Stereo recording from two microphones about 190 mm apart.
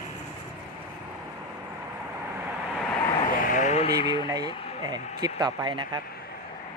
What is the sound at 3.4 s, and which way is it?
Vehicle, 45° left (ahead or behind).